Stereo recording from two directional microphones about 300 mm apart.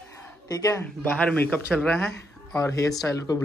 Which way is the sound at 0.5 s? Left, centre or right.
Centre.